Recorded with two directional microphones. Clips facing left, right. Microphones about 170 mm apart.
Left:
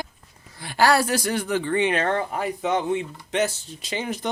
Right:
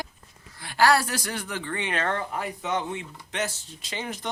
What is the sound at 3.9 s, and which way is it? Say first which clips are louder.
Speech: left 5 dB; 15° left (ahead or behind).